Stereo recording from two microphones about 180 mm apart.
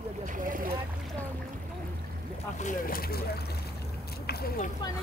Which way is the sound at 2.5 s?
45° left (ahead or behind).